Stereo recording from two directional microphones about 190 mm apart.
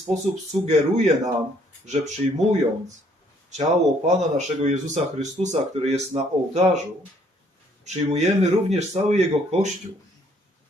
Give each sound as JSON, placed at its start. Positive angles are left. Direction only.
{"t": 0.5, "sound": "speech", "side_deg": -35}
{"t": 3.7, "sound": "speech", "side_deg": -40}
{"t": 7.9, "sound": "speech", "side_deg": -35}